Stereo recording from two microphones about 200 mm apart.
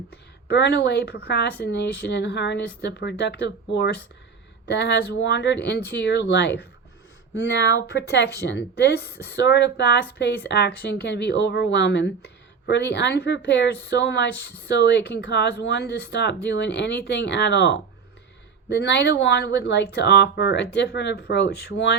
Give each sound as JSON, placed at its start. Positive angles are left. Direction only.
{"t": 0.4, "sound": "speech", "side_deg": 55}